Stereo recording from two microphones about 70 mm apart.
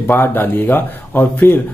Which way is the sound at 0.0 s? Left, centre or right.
Left.